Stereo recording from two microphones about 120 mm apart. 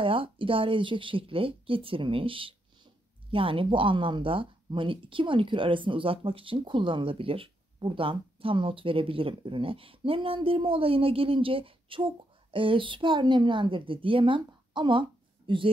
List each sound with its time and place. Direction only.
0.0 s speech: 50° right (ahead or behind)